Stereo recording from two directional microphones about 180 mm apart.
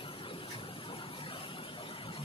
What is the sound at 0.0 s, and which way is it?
Vehicle, 30° left (ahead or behind).